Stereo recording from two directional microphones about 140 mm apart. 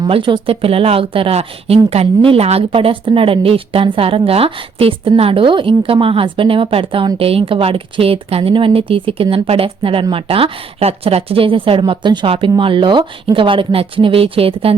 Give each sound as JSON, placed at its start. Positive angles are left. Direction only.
{"t": 0.0, "sound": "speech", "side_deg": -35}